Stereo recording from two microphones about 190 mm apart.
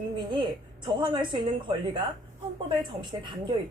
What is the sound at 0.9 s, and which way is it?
Speech, 25° right (ahead or behind).